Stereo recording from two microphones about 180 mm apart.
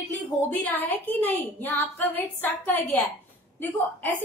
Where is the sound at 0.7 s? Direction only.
10° left (ahead or behind).